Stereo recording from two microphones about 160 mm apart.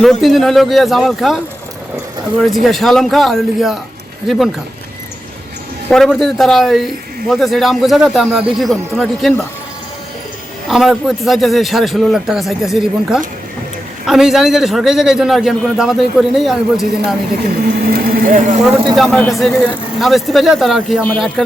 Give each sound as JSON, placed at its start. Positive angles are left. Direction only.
{"t": 0.0, "sound": "a man's voice", "side_deg": 0}
{"t": 2.4, "sound": "a man's voice", "side_deg": 0}
{"t": 5.9, "sound": "a man's voice", "side_deg": 5}
{"t": 10.7, "sound": "a man's voice", "side_deg": 0}
{"t": 17.9, "sound": "speech", "side_deg": -60}
{"t": 18.9, "sound": "a man's voice", "side_deg": 0}